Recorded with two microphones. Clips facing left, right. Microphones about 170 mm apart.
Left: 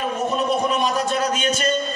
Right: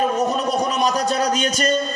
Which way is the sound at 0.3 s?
40° right (ahead or behind).